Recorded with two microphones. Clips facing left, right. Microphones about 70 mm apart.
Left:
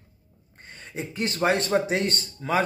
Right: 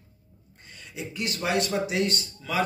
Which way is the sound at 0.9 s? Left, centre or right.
Left.